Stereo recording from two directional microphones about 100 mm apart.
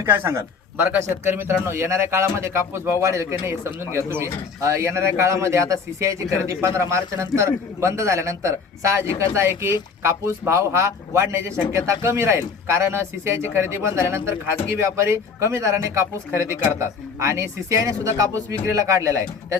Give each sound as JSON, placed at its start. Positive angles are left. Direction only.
{"t": 0.0, "sound": "speech", "side_deg": -25}